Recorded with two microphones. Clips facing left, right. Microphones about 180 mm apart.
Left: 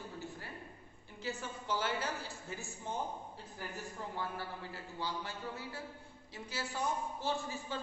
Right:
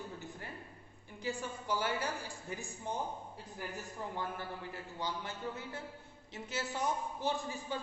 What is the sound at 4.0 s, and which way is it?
A man's voice, 15° right (ahead or behind).